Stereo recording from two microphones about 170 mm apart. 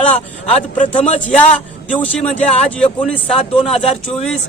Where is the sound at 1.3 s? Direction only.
5° left (ahead or behind).